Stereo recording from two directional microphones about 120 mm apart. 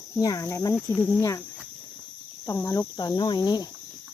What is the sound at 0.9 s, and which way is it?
Speech, 10° left (ahead or behind).